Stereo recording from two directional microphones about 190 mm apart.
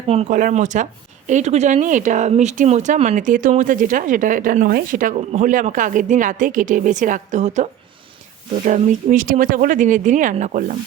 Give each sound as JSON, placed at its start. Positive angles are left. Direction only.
{"t": 0.1, "sound": "speech", "side_deg": -35}
{"t": 0.3, "sound": "speech", "side_deg": -45}